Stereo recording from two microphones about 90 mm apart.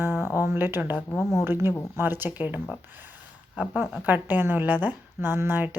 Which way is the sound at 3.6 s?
20° right (ahead or behind).